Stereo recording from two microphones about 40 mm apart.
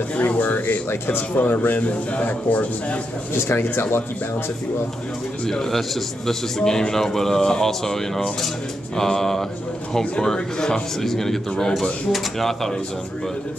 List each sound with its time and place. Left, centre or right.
0.4 s speech: left
1.8 s a man's voice: left
3.3 s speech: left
5.5 s a man's voice: centre